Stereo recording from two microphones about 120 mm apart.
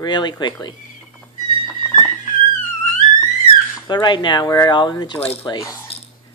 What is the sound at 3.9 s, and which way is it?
Speech, 40° left (ahead or behind).